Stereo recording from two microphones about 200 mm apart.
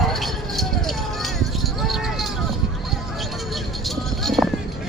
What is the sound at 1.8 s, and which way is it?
Vehicle, centre (ahead or behind).